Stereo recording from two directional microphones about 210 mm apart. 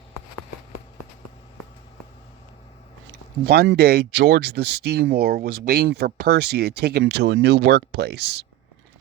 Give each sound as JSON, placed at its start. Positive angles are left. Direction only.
{"t": 3.4, "sound": "speech", "side_deg": -50}